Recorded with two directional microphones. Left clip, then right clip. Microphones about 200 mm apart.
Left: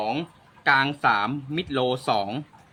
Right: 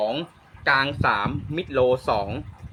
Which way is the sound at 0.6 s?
40° left (ahead or behind).